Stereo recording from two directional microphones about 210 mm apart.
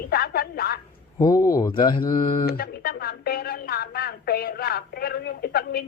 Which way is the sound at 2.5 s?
45° left (ahead or behind).